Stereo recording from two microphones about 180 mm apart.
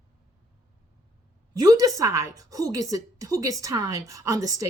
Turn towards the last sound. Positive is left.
turn(degrees=-20)  # may be behind; listen again after turning